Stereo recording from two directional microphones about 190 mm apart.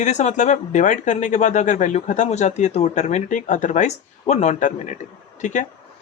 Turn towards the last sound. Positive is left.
turn(degrees=40)  # may be behind; listen again after turning